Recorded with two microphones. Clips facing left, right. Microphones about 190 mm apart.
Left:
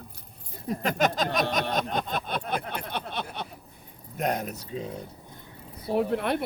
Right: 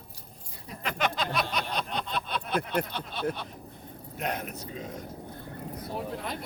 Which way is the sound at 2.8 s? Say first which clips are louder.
Left 4 dB; 65° left (ahead or behind).